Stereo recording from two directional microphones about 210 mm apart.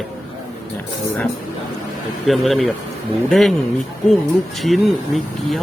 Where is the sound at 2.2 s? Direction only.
Centre (ahead or behind).